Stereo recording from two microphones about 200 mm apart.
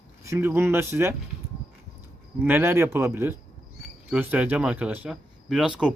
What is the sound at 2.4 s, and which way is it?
Speech, 10° right (ahead or behind).